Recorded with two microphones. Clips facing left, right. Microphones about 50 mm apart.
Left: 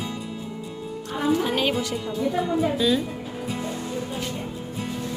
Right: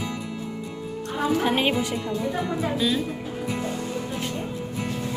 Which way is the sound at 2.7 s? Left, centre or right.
Centre.